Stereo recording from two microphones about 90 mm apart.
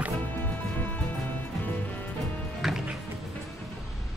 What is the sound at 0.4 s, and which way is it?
Music, 20° left (ahead or behind).